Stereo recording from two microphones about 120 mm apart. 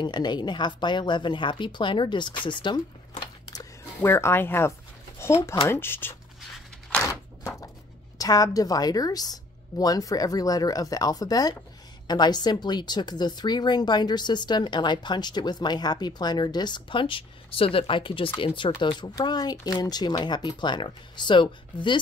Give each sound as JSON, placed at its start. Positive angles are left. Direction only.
{"t": 0.0, "sound": "speech", "side_deg": 40}
{"t": 4.0, "sound": "speech", "side_deg": 20}
{"t": 7.0, "sound": "a sound", "side_deg": 25}
{"t": 8.2, "sound": "speech", "side_deg": 30}